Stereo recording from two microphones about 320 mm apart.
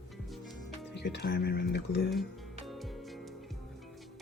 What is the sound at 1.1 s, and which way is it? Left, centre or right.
Speech, left.